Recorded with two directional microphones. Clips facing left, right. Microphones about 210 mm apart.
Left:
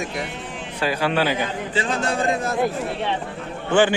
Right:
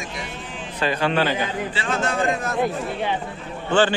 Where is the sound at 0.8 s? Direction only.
10° left (ahead or behind).